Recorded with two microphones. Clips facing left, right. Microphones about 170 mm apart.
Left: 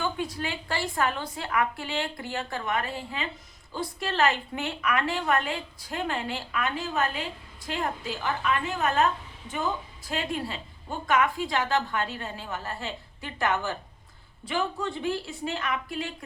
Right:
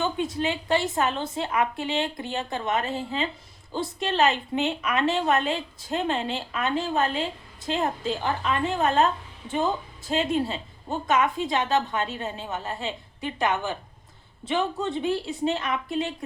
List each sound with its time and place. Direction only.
0.0 s speech: 25° right (ahead or behind)